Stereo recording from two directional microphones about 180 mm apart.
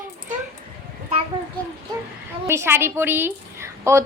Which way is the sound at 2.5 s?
15° right (ahead or behind).